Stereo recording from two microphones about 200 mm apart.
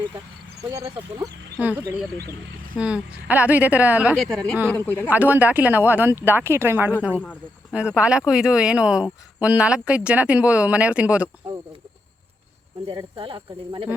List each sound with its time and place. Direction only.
0.7 s speech: 15° right (ahead or behind); by 5.1 s 10° left (ahead or behind)
5.1 s speech: 10° right (ahead or behind)
7.1 s speech: 10° left (ahead or behind)
7.7 s speech: 5° right (ahead or behind)
12.9 s speech: 25° right (ahead or behind)